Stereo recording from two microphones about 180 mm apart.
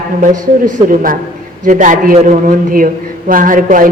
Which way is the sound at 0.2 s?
50° right (ahead or behind).